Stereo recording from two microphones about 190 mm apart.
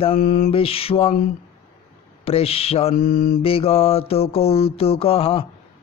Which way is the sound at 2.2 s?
30° left (ahead or behind).